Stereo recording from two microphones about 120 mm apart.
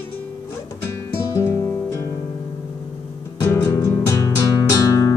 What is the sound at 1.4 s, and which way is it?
Music, 20° left (ahead or behind).